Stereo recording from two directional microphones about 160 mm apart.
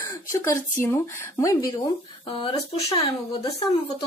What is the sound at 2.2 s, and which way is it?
Speech, 35° left (ahead or behind).